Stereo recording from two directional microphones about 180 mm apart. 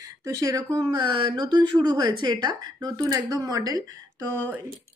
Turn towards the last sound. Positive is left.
turn(degrees=-15)  # may be behind; listen again after turning